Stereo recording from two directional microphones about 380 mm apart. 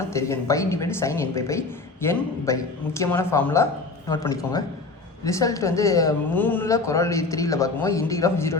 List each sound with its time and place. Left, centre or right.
0.1 s a woman's voice: centre